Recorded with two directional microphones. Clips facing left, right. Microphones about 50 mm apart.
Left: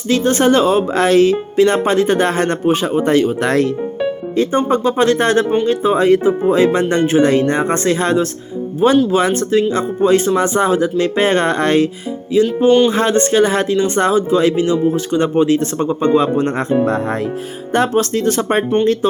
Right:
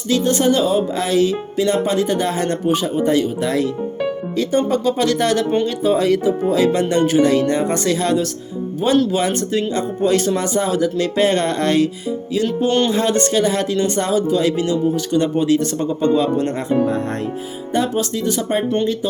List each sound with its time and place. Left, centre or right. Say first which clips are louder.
0.1 s speech: left 3 dB; left
4.4 s speech: left 3 dB; left
12.3 s music: left 7 dB; left
12.9 s speech: left 3 dB; left